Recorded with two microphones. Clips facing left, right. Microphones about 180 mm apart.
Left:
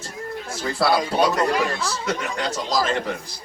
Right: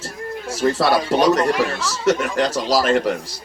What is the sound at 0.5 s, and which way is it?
Speech, 80° right.